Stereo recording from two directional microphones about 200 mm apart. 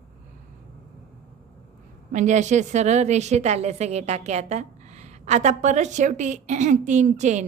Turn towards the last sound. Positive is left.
turn(degrees=-35)  # may be behind; listen again after turning